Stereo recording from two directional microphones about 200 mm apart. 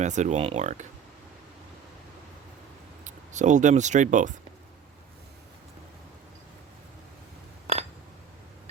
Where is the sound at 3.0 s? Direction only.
35° right (ahead or behind).